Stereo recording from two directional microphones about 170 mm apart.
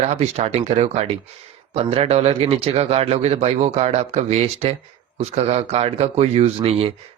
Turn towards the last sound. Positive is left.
turn(degrees=-35)  # may be behind; listen again after turning